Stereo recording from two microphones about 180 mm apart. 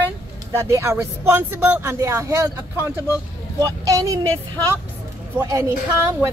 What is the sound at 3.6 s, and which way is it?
Speech, 20° right (ahead or behind).